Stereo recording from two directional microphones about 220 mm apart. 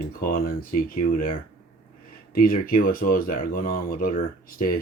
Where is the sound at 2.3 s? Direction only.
40° left (ahead or behind).